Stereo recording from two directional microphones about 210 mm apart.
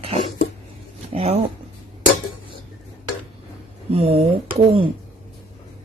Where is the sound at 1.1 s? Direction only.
30° right (ahead or behind).